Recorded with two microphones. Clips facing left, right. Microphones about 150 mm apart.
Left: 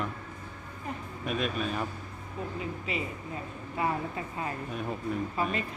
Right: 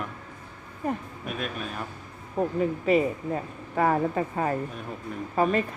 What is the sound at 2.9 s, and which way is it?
Speech, 50° right (ahead or behind).